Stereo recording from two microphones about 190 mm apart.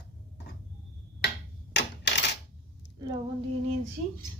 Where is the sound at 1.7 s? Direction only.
65° left (ahead or behind).